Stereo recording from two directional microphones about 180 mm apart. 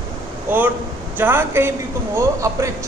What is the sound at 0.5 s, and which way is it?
Speech, 10° right (ahead or behind).